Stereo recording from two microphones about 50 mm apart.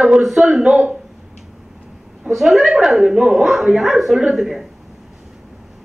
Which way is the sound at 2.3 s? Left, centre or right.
Centre.